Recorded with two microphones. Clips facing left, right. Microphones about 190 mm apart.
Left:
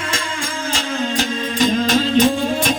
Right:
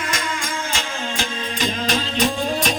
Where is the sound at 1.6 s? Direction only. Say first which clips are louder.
Left 7 dB; 45° left (ahead or behind).